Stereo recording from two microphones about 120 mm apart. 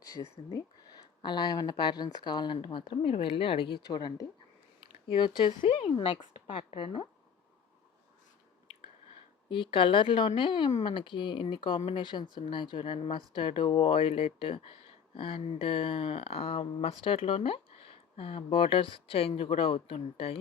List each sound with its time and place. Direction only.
1.2 s speech: 40° left (ahead or behind)
5.7 s speech: 55° left (ahead or behind)
9.7 s speech: 45° left (ahead or behind)